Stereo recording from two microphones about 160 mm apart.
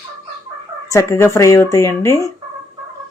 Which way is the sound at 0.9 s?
20° left (ahead or behind).